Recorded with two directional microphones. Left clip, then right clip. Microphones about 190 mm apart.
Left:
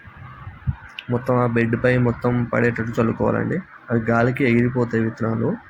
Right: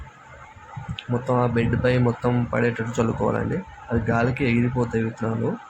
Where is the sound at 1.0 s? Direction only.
10° left (ahead or behind).